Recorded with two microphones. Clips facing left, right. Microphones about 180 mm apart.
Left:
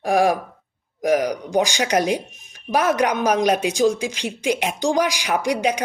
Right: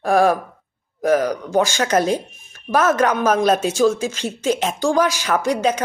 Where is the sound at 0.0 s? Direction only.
15° left (ahead or behind).